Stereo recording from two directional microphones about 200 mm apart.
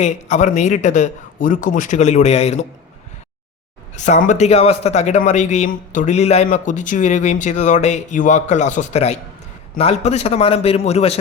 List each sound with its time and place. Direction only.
0.0 s speech: 35° left (ahead or behind)
3.9 s speech: 35° left (ahead or behind)